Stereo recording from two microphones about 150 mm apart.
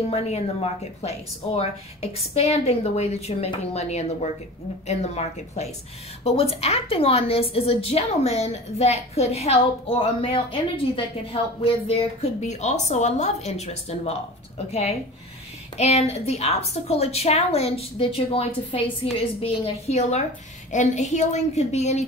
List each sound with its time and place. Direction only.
0.1 s a woman's voice: 45° left (ahead or behind)